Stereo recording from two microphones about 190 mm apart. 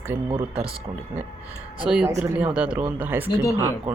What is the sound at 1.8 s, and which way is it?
Speech, 5° right (ahead or behind).